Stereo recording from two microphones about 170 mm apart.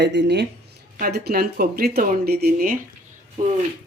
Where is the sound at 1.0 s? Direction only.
65° right (ahead or behind).